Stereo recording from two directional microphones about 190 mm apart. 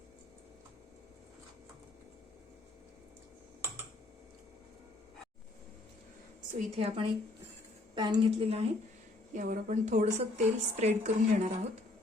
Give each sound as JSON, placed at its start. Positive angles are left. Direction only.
{"t": 6.5, "sound": "a woman's voice", "side_deg": -30}
{"t": 9.3, "sound": "a woman's voice", "side_deg": -40}